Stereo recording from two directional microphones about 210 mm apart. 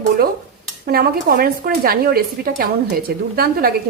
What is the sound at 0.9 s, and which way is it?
Speech, 45° right (ahead or behind).